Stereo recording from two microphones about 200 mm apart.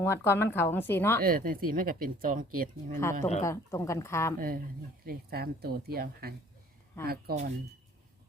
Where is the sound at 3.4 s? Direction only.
15° left (ahead or behind).